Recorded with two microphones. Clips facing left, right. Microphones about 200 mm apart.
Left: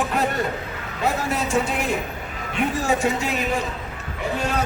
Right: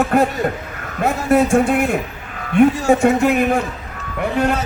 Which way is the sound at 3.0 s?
55° right (ahead or behind).